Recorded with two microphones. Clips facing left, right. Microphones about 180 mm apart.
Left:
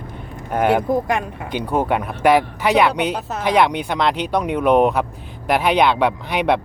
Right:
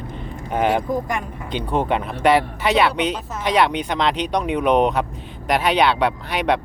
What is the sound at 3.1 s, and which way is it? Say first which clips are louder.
Speech: left 3 dB; 70° left (ahead or behind).